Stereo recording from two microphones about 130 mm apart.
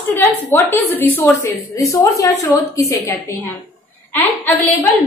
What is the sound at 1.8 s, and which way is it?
A woman's voice, 25° left (ahead or behind).